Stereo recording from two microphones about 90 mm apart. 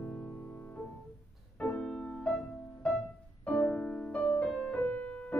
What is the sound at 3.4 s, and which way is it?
Music, 15° left (ahead or behind).